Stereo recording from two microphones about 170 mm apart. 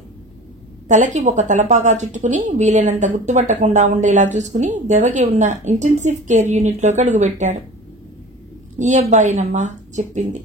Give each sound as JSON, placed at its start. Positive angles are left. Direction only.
{"t": 0.8, "sound": "a woman's voice", "side_deg": -45}
{"t": 8.7, "sound": "a woman's voice", "side_deg": -45}